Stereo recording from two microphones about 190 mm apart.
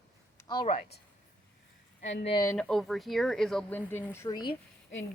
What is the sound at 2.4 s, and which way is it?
Speech, 5° left (ahead or behind).